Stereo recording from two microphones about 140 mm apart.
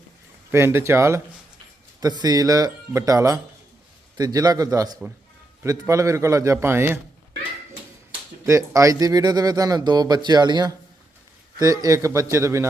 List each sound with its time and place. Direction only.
0.5 s speech: 20° right (ahead or behind)
8.4 s speech: 25° right (ahead or behind)